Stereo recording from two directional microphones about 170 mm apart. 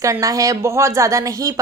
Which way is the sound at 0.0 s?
20° right (ahead or behind).